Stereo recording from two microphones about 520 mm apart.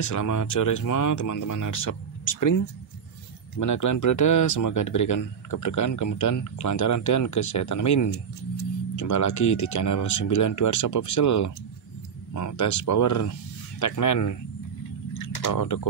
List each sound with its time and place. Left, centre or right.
0.0 s speech: left
3.5 s speech: left